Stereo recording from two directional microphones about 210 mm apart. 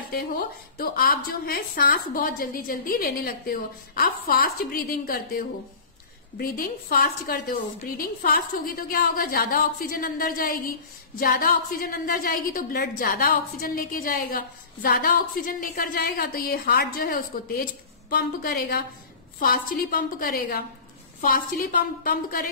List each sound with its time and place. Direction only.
0.7 s a woman's voice: 45° left (ahead or behind)